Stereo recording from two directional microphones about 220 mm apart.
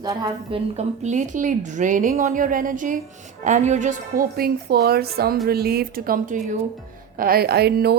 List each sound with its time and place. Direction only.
0.0 s a woman's voice: 20° right (ahead or behind); by 7.9 s 45° right (ahead or behind)